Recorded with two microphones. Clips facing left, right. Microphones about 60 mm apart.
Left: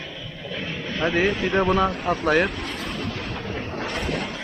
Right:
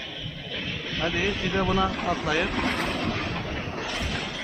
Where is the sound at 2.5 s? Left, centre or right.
Right.